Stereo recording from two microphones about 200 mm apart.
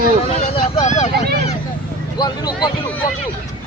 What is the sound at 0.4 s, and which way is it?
Vehicle, 30° left (ahead or behind).